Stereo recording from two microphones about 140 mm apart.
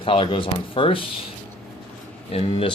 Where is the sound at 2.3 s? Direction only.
45° left (ahead or behind).